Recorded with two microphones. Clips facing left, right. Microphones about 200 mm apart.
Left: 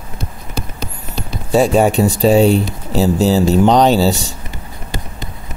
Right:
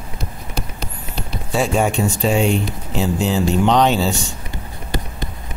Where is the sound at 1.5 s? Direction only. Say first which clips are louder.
Left 6 dB; 40° left (ahead or behind).